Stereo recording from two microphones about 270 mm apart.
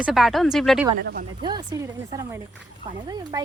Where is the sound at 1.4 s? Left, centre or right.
Centre.